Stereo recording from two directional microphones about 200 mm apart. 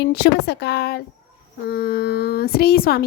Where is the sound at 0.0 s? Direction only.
55° left (ahead or behind).